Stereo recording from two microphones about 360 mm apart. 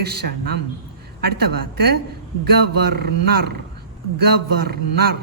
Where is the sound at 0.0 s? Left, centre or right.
Right.